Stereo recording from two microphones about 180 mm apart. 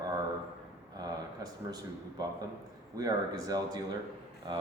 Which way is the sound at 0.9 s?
20° right (ahead or behind).